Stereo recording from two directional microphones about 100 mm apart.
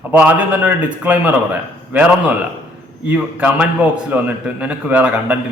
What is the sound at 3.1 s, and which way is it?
A man's voice, 15° right (ahead or behind).